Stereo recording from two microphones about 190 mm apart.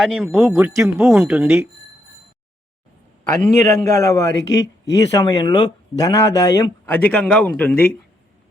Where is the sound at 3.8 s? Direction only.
15° left (ahead or behind).